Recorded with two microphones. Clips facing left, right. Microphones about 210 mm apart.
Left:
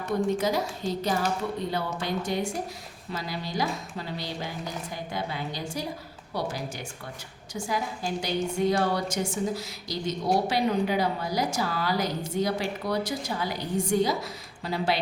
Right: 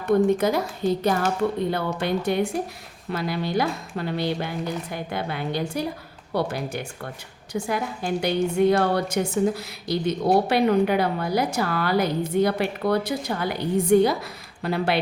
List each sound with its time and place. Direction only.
0.3 s a woman's voice: 55° right (ahead or behind)